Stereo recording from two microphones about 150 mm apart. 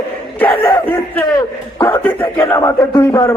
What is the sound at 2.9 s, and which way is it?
Speech, 30° left (ahead or behind).